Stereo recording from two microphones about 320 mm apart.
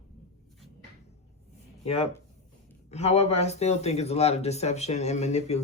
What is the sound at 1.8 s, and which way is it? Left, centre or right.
Speech, centre.